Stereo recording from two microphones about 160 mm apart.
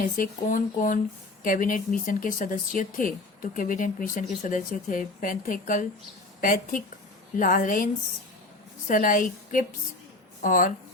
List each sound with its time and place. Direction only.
0.0 s speech: 55° left (ahead or behind)
8.9 s speech: 60° left (ahead or behind)